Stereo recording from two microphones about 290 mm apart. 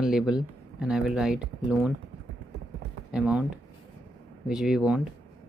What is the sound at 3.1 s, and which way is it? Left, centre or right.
Speech, centre.